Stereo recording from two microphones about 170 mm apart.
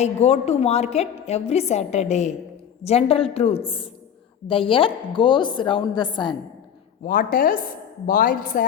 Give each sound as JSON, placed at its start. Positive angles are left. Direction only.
{"t": 0.0, "sound": "a woman's voice", "side_deg": 40}
{"t": 7.0, "sound": "a woman's voice", "side_deg": 55}